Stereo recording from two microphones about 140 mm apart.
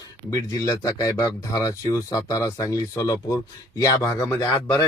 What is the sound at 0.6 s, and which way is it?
Speech, 25° left (ahead or behind).